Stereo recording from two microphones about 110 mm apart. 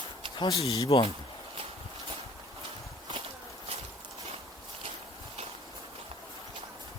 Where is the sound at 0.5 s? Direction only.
65° left (ahead or behind).